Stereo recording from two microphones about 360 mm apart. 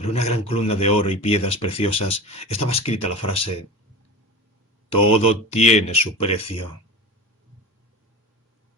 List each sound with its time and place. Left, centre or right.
0.0 s speech: centre
4.9 s speech: centre